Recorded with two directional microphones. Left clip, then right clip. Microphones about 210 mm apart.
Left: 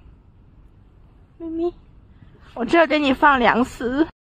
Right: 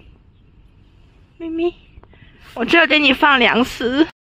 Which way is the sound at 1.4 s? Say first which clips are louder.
Right 4 dB; 15° right (ahead or behind).